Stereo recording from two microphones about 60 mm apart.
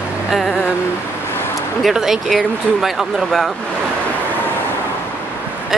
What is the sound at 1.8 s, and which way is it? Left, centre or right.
Speech, centre.